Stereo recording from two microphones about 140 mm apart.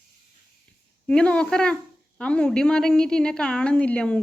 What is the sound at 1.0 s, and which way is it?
A woman's voice, 5° left (ahead or behind).